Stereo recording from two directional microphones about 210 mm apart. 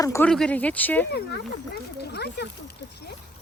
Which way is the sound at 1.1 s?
50° left (ahead or behind).